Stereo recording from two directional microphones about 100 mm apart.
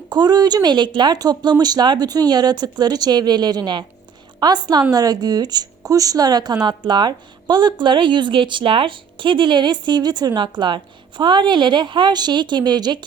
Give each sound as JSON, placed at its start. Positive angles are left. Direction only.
{"t": 0.1, "sound": "a woman's voice", "side_deg": -45}